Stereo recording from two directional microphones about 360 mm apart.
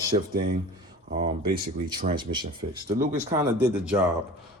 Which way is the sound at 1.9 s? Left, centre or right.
Centre.